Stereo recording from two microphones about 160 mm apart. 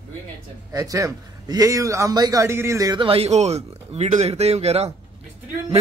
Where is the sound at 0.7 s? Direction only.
20° right (ahead or behind).